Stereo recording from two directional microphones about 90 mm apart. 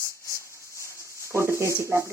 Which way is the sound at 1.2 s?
30° right (ahead or behind).